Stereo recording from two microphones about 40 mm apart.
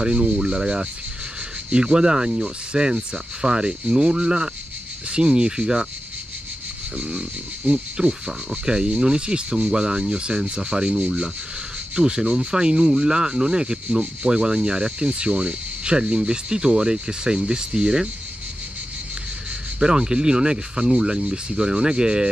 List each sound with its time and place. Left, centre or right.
0.0 s speech: right
7.0 s speech: right
19.8 s speech: centre